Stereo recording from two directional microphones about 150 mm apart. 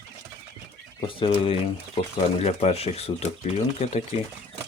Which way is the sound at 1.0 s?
35° left (ahead or behind).